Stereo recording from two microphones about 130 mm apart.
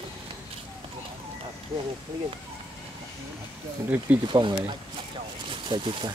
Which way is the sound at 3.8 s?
15° right (ahead or behind).